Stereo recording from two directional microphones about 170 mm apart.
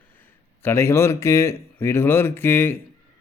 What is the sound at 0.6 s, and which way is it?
A man's voice, 15° left (ahead or behind).